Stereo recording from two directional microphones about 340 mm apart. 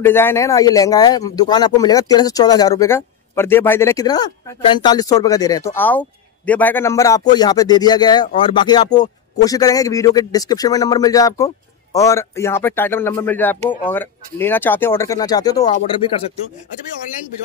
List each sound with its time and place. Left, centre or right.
0.0 s speech: centre